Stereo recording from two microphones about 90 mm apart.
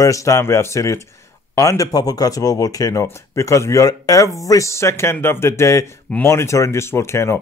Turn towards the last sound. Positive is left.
turn(degrees=30)  # may be behind; listen again after turning